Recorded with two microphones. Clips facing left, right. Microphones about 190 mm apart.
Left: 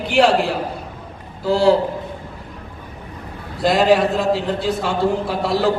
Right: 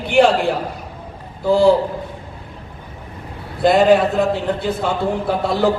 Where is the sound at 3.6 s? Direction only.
60° right (ahead or behind).